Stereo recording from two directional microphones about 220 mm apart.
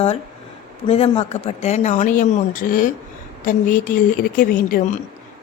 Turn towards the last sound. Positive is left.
turn(degrees=40)  # may be behind; listen again after turning